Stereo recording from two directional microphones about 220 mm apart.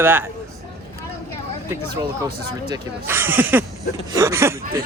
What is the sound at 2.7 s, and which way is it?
Speech, 10° right (ahead or behind).